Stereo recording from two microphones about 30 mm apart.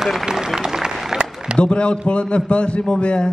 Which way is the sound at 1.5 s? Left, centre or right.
Left.